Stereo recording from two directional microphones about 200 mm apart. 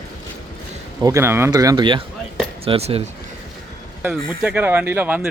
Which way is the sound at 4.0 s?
5° right (ahead or behind).